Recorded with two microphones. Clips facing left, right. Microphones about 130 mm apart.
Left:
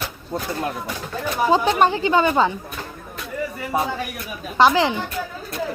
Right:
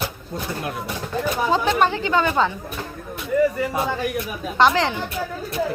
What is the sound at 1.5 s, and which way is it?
Speech, 15° left (ahead or behind).